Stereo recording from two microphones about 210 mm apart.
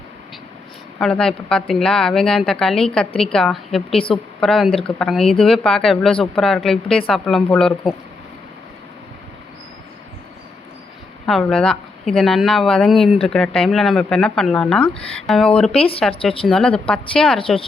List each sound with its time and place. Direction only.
0.9 s a woman's voice: 5° left (ahead or behind)
5.2 s speech: 25° left (ahead or behind)
5.5 s a woman's voice: centre (ahead or behind)
11.3 s a woman's voice: centre (ahead or behind)
15.7 s speech: 25° left (ahead or behind)
16.5 s a woman's voice: 5° left (ahead or behind)